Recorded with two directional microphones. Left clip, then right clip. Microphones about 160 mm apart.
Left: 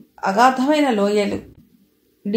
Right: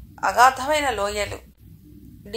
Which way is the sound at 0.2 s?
35° right (ahead or behind).